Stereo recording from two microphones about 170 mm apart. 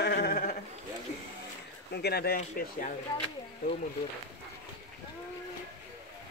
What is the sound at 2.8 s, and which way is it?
Speech, 45° left (ahead or behind).